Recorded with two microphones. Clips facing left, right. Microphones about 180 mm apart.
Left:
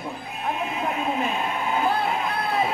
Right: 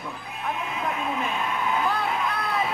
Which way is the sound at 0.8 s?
30° left (ahead or behind).